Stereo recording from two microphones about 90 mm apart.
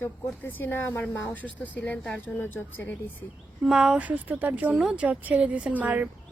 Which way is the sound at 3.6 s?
5° right (ahead or behind).